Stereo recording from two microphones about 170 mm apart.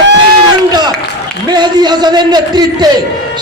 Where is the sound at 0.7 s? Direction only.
25° right (ahead or behind).